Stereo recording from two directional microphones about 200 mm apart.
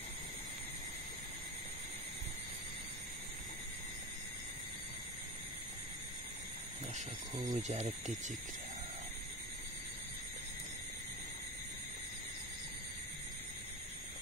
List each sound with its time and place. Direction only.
7.4 s speech: 35° right (ahead or behind)